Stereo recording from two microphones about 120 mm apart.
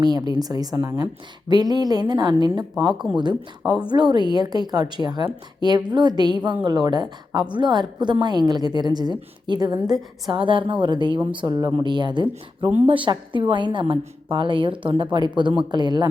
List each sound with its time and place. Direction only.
0.0 s a woman's voice: 35° right (ahead or behind)
9.8 s a woman's voice: centre (ahead or behind)
10.3 s a woman's voice: 45° right (ahead or behind)